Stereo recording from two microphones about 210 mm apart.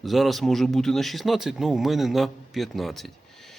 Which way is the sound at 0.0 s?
Centre (ahead or behind).